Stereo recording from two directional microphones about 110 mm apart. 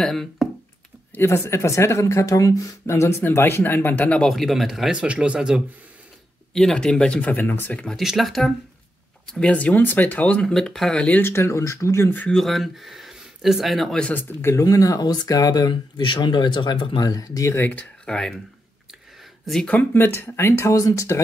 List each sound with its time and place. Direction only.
0.0 s speech: centre (ahead or behind)
1.1 s speech: 25° left (ahead or behind)
4.3 s speech: centre (ahead or behind)
6.5 s speech: 5° left (ahead or behind)
8.0 s speech: centre (ahead or behind); by 12.3 s 20° left (ahead or behind)
12.3 s speech: centre (ahead or behind)
14.4 s speech: 30° left (ahead or behind)
17.6 s speech: 15° left (ahead or behind)
19.4 s speech: centre (ahead or behind)
19.7 s speech: 15° left (ahead or behind)